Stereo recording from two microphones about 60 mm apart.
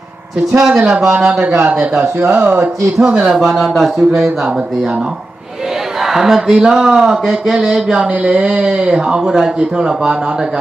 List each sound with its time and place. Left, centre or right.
0.5 s speech: centre
3.3 s speech: centre
6.0 s speech: centre